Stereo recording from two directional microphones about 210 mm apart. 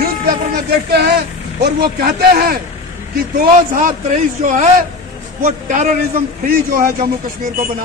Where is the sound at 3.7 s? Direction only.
40° right (ahead or behind).